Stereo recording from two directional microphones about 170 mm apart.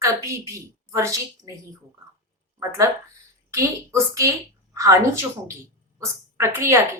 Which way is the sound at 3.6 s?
20° right (ahead or behind).